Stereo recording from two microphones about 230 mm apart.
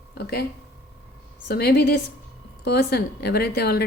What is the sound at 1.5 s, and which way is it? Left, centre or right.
A woman's voice, left.